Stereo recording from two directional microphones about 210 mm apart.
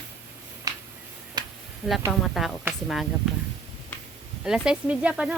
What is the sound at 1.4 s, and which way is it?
Finger snapping, 20° right (ahead or behind).